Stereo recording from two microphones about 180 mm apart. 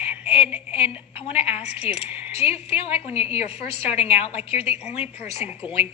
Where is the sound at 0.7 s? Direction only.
30° left (ahead or behind).